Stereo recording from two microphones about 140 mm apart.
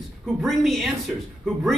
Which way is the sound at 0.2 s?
Centre (ahead or behind).